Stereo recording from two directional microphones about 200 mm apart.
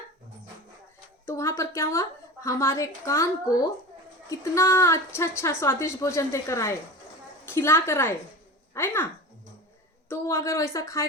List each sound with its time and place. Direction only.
1.3 s a woman's voice: 15° left (ahead or behind)
10.1 s speech: 15° left (ahead or behind)